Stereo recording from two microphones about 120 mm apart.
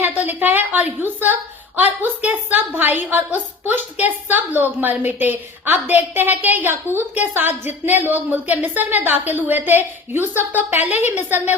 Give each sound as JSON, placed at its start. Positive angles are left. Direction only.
{"t": 0.0, "sound": "a woman's voice", "side_deg": -15}